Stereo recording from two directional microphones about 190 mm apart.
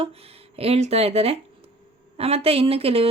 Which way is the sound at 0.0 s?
30° right (ahead or behind).